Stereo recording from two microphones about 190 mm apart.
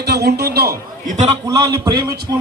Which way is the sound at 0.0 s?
60° right (ahead or behind).